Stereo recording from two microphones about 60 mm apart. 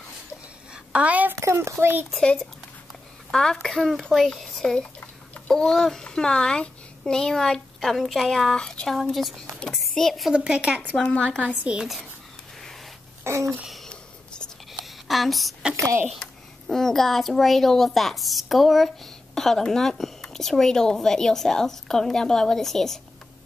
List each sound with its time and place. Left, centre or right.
0.9 s a woman's voice: right
1.4 s a child's voice: right
2.1 s a child's voice: centre
8.9 s a child's voice: centre
10.3 s speech: centre
11.0 s a child's voice: centre
11.4 s speech: centre
13.2 s a sound: right
13.8 s a sound: centre
14.7 s a sound: centre
15.7 s a child's voice: right
16.6 s a child's voice: centre